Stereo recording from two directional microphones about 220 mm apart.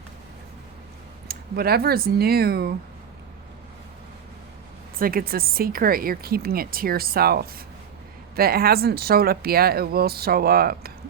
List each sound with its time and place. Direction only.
1.3 s speech: 45° right (ahead or behind)
4.9 s speech: 40° right (ahead or behind)